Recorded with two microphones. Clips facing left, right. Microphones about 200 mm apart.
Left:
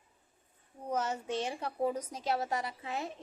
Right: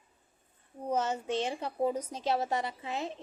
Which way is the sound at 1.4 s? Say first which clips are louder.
Right 1 dB; 20° right (ahead or behind).